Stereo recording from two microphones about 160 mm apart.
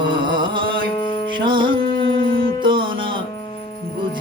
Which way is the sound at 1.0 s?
30° left (ahead or behind).